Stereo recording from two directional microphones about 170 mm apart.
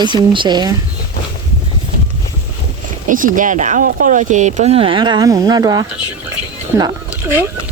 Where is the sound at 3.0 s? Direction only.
50° right (ahead or behind); by 5.9 s 20° right (ahead or behind).